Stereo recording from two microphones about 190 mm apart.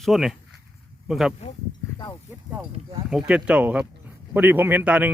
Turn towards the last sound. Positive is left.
turn(degrees=-10)  # may be behind; listen again after turning